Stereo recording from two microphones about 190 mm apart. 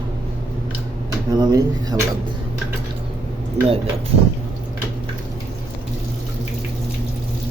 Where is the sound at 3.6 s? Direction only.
35° right (ahead or behind).